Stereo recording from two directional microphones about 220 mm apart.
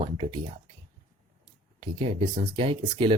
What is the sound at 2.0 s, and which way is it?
Speech, 25° right (ahead or behind).